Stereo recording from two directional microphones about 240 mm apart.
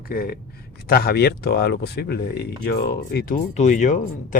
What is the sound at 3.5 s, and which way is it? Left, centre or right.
Speech, left.